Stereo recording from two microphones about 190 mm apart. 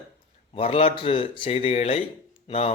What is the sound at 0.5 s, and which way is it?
A man's voice, 30° left (ahead or behind).